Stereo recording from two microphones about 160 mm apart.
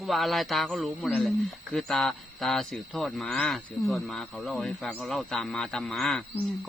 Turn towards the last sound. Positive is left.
turn(degrees=5)  # may be behind; listen again after turning